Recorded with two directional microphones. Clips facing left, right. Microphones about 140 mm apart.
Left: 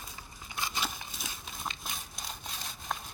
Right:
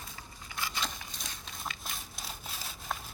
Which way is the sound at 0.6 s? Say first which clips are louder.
Left 1 dB; 10° left (ahead or behind).